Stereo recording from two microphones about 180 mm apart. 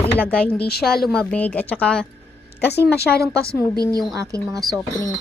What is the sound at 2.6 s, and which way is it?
Speech, 65° left (ahead or behind).